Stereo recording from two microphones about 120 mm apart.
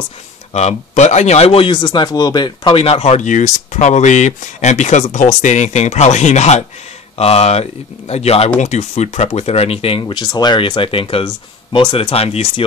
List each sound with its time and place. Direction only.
0.5 s speech: 65° left (ahead or behind)
1.7 s speech: 40° left (ahead or behind); by 6.6 s 70° left (ahead or behind)
7.2 s speech: 60° left (ahead or behind)
8.5 s speech: 70° left (ahead or behind); by 12.6 s 55° left (ahead or behind)